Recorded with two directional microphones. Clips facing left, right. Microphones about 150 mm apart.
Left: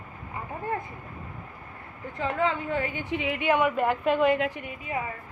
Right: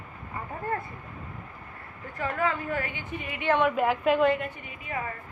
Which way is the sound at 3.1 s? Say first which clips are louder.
Left 9 dB; 90° left.